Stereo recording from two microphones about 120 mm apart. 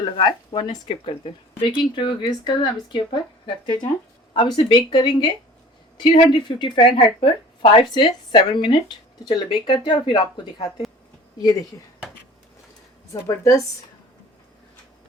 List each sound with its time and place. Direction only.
0.0 s speech: 40° left (ahead or behind)
0.9 s speech: 50° left (ahead or behind)
13.2 s speech: 25° left (ahead or behind)